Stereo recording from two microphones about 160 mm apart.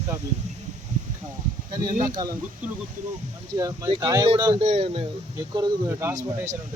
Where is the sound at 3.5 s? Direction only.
20° right (ahead or behind).